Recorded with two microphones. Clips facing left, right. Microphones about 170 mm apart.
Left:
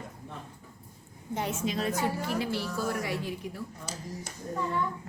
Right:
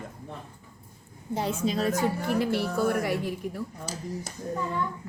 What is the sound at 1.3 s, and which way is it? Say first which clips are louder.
Speech: right 4 dB; 35° right (ahead or behind).